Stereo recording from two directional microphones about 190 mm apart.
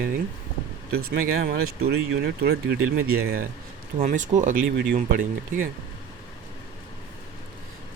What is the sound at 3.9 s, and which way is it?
Speech, 40° right (ahead or behind).